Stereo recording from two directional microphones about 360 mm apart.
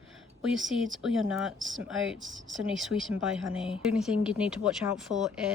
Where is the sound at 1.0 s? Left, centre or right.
Centre.